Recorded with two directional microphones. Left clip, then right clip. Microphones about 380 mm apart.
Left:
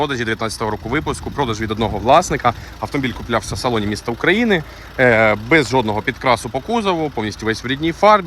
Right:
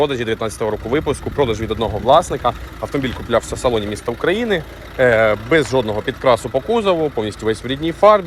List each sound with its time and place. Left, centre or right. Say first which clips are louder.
0.0 s speech: right 2 dB; centre